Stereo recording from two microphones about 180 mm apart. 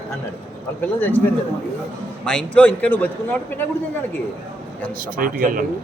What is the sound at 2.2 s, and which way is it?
A man's voice, 5° left (ahead or behind).